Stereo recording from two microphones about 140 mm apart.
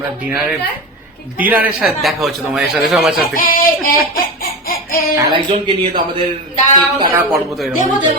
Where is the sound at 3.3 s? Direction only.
80° left.